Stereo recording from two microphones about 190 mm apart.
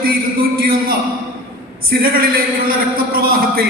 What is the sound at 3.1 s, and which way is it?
Speech, 50° right (ahead or behind).